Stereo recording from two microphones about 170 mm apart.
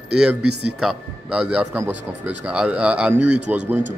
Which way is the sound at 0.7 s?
5° right (ahead or behind).